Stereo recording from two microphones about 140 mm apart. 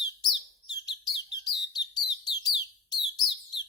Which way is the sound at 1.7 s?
30° left (ahead or behind).